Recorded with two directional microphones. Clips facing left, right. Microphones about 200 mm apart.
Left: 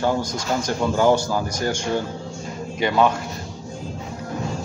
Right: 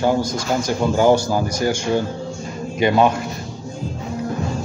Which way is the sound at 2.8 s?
15° right (ahead or behind).